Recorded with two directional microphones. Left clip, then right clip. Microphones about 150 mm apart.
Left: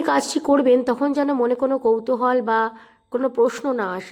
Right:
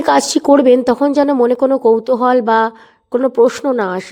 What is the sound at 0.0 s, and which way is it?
Speech, 55° right (ahead or behind).